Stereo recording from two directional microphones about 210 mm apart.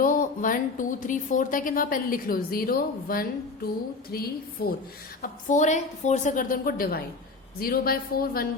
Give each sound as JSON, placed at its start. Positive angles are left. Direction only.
{"t": 0.0, "sound": "a woman's voice", "side_deg": 40}
{"t": 5.2, "sound": "a woman's voice", "side_deg": 35}